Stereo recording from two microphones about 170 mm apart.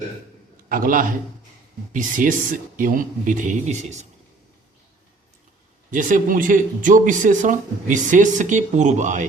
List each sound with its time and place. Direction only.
0.7 s speech: 55° right (ahead or behind)
5.9 s speech: 50° right (ahead or behind)